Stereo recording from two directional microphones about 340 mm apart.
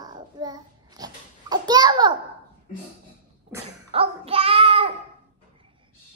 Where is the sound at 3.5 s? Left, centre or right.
Centre.